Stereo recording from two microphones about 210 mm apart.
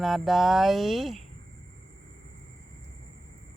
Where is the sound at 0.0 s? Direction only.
Centre (ahead or behind).